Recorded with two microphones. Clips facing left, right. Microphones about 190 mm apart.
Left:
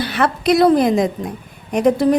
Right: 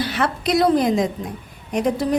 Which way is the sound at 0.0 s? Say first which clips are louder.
Left 4 dB; 60° left (ahead or behind).